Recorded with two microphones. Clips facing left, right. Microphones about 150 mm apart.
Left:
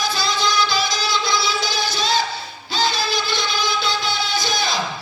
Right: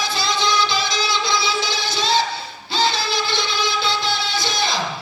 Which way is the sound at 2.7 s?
25° right (ahead or behind).